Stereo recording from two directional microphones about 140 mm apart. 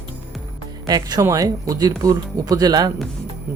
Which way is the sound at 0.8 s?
25° right (ahead or behind).